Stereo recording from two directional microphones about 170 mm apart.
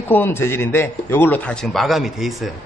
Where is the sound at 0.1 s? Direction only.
15° left (ahead or behind).